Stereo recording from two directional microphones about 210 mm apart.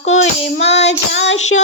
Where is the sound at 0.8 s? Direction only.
60° left (ahead or behind).